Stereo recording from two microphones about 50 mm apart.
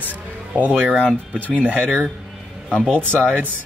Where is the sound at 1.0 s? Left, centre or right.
Right.